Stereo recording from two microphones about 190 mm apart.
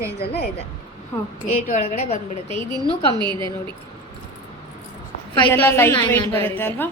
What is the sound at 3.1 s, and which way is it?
Speech, 25° right (ahead or behind).